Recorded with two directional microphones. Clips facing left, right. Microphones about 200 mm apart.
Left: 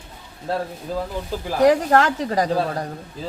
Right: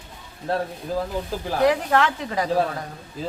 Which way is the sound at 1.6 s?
40° left (ahead or behind).